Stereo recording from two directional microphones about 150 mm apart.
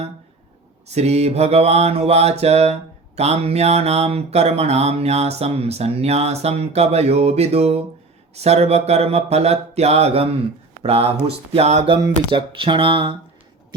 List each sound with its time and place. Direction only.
0.9 s speech: 45° right (ahead or behind)
12.3 s speech: 35° right (ahead or behind)